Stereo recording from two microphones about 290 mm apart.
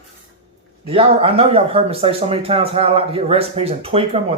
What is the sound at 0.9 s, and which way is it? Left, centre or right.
Speech, centre.